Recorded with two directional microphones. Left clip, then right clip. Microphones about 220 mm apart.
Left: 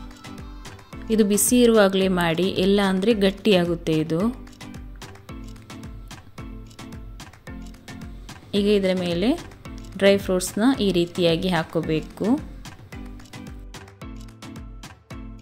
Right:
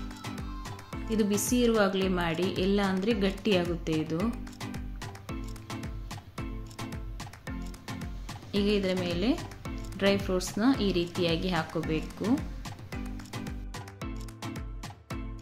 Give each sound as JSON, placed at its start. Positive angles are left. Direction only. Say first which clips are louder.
{"t": 1.1, "sound": "a woman's voice", "louder": "left 9 dB", "side_deg": 40}
{"t": 8.5, "sound": "a woman's voice", "louder": "left 8 dB", "side_deg": 35}